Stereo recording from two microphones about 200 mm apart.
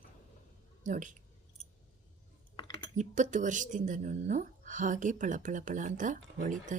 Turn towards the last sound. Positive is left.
turn(degrees=-40)  # may be behind; listen again after turning